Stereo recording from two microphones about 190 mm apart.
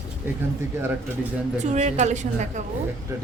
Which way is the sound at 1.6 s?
40° right (ahead or behind).